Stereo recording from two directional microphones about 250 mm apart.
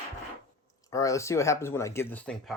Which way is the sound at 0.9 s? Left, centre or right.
Centre.